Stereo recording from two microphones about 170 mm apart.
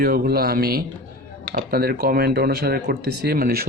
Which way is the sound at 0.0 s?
60° right (ahead or behind).